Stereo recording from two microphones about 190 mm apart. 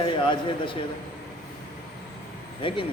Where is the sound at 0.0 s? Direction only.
25° left (ahead or behind).